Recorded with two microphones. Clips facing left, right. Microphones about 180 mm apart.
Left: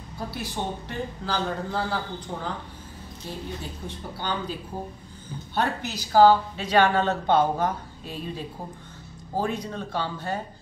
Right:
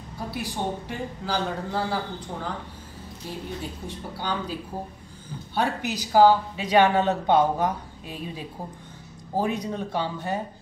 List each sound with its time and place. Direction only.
0.3 s a woman's voice: 10° right (ahead or behind)
3.8 s a woman's voice: 10° right (ahead or behind)